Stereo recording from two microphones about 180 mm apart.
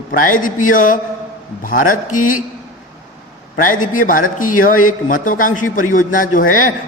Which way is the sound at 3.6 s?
50° left (ahead or behind).